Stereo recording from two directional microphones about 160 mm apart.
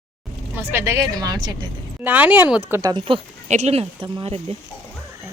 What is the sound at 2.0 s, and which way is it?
Speech, 10° right (ahead or behind).